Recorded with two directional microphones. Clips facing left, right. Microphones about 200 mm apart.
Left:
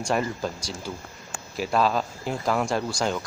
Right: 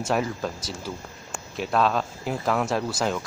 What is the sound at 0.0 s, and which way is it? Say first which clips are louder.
Speech: even; centre (ahead or behind).